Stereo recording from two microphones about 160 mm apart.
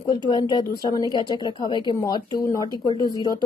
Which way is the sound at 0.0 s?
30° left (ahead or behind).